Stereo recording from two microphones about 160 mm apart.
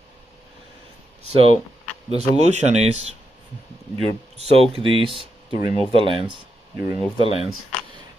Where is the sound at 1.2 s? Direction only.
40° right (ahead or behind).